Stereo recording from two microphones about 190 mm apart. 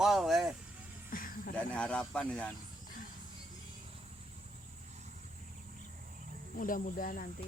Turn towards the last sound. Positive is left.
turn(degrees=45)  # may be behind; listen again after turning